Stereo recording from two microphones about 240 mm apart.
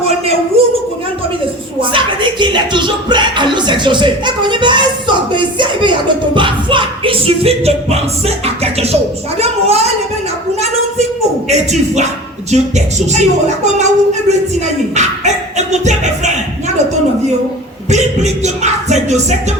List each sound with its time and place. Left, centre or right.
0.0 s a sound: right
1.8 s music: right
9.4 s a sound: right
11.4 s music: right
13.7 s speech: right
14.9 s music: right
17.8 s music: right